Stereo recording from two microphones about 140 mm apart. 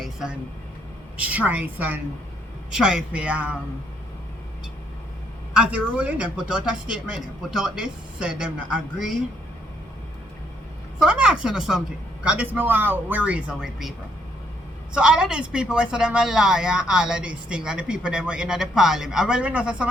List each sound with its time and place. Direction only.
0.0 s a woman's voice: 5° right (ahead or behind)
5.5 s a woman's voice: 10° right (ahead or behind)
11.0 s a woman's voice: 10° right (ahead or behind)
14.9 s a woman's voice: 5° right (ahead or behind)